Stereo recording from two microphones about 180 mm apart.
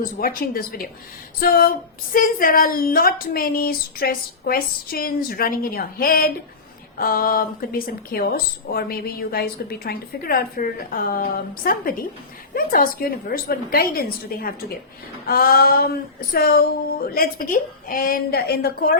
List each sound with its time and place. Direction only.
0.0 s a woman's voice: 55° left (ahead or behind)